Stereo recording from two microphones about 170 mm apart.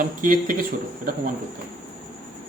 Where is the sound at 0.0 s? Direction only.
55° right (ahead or behind).